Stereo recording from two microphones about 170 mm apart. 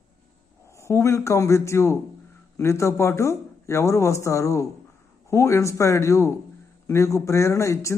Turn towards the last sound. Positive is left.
turn(degrees=15)  # may be behind; listen again after turning